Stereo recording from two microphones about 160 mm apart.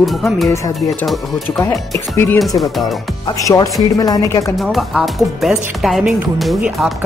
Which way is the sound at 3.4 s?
20° left (ahead or behind).